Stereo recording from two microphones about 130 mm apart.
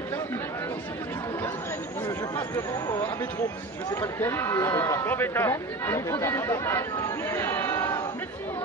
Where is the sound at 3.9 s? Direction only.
20° left (ahead or behind).